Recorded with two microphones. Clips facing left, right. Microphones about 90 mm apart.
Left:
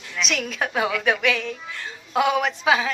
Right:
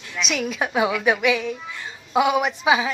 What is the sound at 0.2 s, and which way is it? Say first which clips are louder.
Speech: right 1 dB; 5° right (ahead or behind).